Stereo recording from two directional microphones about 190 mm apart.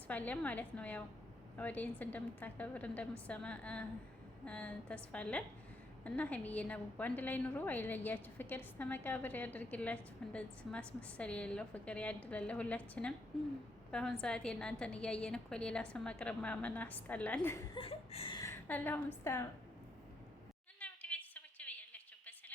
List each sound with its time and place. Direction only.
0.1 s a woman's voice: 10° left (ahead or behind)
17.7 s chuckle: 30° left (ahead or behind)
18.3 s a woman's voice: 15° left (ahead or behind)
20.7 s a sound: 10° left (ahead or behind)